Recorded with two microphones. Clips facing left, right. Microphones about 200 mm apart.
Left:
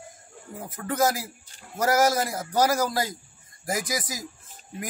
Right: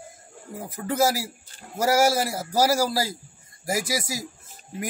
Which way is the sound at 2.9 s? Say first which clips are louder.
Right 1 dB; 30° right (ahead or behind).